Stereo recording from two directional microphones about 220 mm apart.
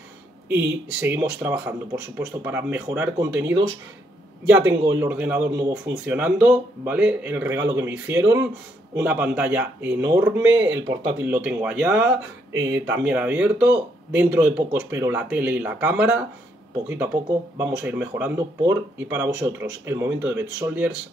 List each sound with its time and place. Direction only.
0.5 s speech: 10° right (ahead or behind)
4.6 s speech: 15° right (ahead or behind)
12.5 s speech: 15° right (ahead or behind)
17.6 s speech: 10° right (ahead or behind)